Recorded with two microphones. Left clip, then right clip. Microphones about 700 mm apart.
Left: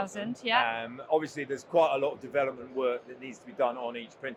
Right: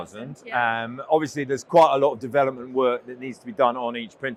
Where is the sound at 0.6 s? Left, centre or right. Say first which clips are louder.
Right 7 dB; right.